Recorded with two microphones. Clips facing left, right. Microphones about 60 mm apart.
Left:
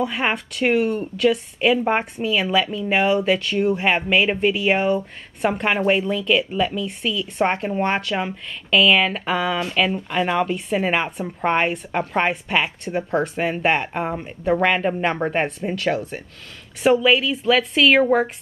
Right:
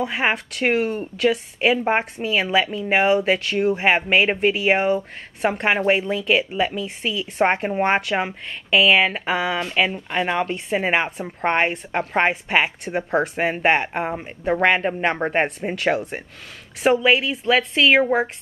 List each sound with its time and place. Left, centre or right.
0.0 s a woman's voice: centre